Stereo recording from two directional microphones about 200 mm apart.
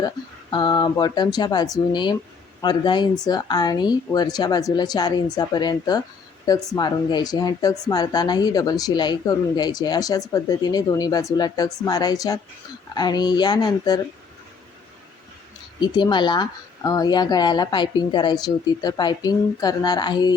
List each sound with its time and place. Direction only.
0.5 s speech: 20° left (ahead or behind)
15.8 s speech: 20° left (ahead or behind)